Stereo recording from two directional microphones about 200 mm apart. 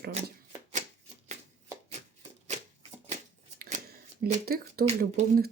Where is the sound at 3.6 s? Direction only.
40° right (ahead or behind).